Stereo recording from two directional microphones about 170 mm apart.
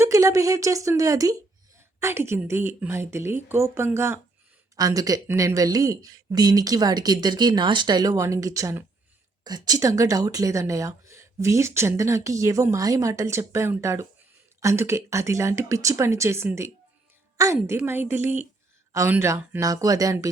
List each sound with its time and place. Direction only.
0.0 s a woman's voice: 20° right (ahead or behind)